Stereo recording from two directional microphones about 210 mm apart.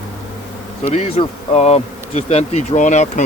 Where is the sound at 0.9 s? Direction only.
30° left (ahead or behind).